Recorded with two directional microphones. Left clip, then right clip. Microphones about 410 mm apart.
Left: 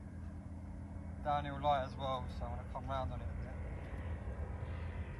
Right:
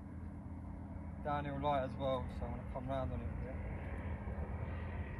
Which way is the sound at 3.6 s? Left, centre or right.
Centre.